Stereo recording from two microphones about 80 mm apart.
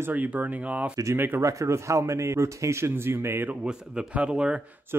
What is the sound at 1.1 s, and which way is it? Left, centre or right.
Speech, right.